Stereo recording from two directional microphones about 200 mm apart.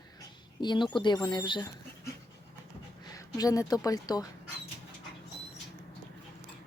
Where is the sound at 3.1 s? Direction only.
20° left (ahead or behind).